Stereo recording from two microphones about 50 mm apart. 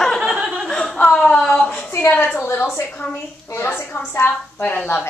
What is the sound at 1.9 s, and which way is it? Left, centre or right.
Speech, left.